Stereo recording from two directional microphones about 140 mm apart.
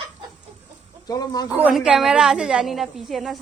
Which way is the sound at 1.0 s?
25° left (ahead or behind).